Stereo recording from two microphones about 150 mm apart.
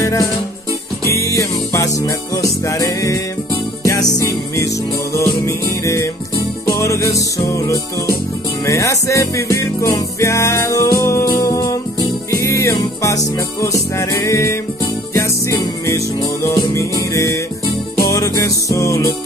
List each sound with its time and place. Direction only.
0.0 s music: 20° left (ahead or behind)